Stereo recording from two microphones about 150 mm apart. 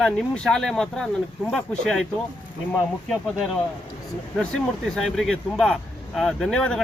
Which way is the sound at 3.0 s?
5° left (ahead or behind).